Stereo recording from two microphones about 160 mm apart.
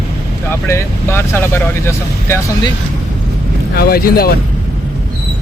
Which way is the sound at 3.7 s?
75° left (ahead or behind).